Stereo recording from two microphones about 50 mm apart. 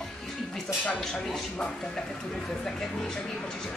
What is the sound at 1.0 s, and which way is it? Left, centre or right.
Speech, centre.